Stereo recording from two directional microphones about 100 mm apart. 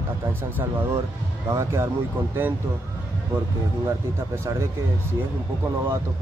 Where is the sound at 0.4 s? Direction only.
20° right (ahead or behind).